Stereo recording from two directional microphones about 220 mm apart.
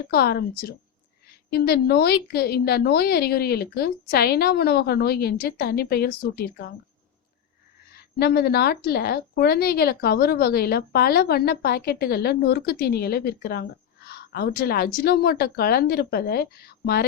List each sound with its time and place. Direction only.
0.1 s speech: 45° left (ahead or behind)
8.2 s speech: 45° left (ahead or behind)